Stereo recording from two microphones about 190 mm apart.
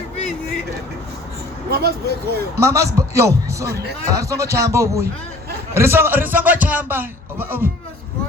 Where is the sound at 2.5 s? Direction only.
15° right (ahead or behind).